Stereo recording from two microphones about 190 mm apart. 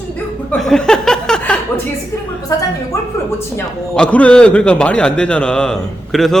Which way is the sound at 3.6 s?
5° left (ahead or behind).